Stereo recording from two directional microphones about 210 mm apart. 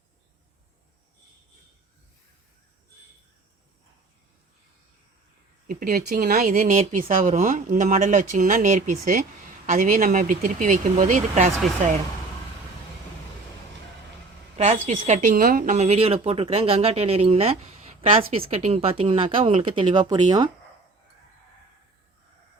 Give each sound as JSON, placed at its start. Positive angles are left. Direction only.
{"t": 5.6, "sound": "speech", "side_deg": -45}
{"t": 14.6, "sound": "speech", "side_deg": -30}